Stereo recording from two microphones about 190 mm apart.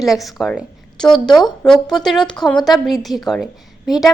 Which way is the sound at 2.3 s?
5° left (ahead or behind).